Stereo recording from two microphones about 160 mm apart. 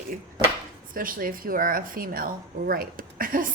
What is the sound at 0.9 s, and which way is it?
A woman's voice, 60° right (ahead or behind).